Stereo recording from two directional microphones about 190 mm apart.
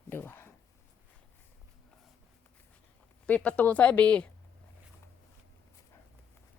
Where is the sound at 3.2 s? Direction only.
5° left (ahead or behind).